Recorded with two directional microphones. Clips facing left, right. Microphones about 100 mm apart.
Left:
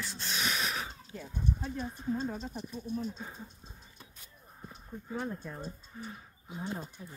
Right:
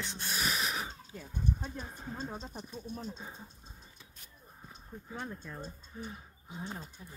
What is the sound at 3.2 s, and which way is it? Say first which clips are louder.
Speech: left 3 dB; centre (ahead or behind).